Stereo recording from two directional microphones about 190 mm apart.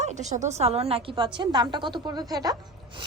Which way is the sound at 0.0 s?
35° right (ahead or behind).